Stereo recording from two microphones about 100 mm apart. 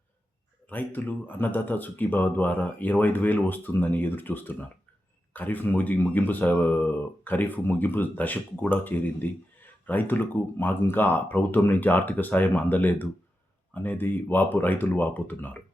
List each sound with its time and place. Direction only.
0.7 s speech: 20° left (ahead or behind)